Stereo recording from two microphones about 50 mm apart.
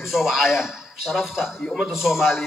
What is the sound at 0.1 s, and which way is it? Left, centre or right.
A man's voice, centre.